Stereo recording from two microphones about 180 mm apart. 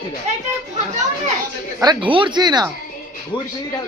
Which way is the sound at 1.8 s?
25° right (ahead or behind).